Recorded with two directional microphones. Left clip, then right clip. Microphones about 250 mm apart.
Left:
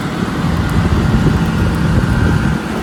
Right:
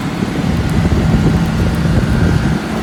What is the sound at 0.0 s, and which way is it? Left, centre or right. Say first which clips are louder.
Vehicle: even; centre.